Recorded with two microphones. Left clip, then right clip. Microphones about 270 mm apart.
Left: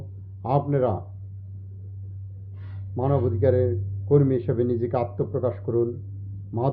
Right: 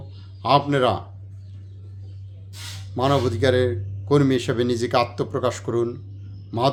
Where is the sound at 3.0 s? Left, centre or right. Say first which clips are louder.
Right 4 dB; centre.